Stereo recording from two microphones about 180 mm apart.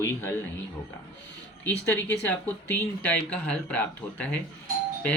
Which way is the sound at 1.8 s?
10° left (ahead or behind).